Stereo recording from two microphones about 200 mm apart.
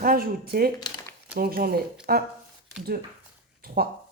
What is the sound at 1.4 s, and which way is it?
Speech, 50° right (ahead or behind).